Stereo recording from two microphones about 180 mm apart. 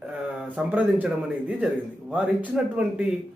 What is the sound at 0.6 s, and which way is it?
Speech, 5° right (ahead or behind).